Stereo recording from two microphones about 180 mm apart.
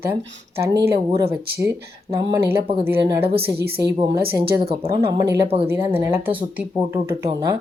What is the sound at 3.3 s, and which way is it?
Speech, 60° right (ahead or behind).